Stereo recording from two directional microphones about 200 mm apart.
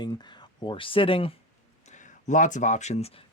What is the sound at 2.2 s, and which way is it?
Speech, 40° left (ahead or behind).